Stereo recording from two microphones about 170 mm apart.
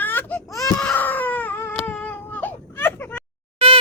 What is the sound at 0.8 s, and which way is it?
Baby cry, 10° left (ahead or behind).